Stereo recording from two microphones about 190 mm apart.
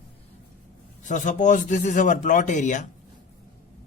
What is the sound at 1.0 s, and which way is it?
Speech, 40° left (ahead or behind).